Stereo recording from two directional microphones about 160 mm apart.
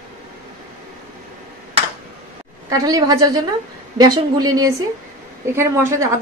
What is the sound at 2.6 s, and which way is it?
A woman's voice, 25° right (ahead or behind).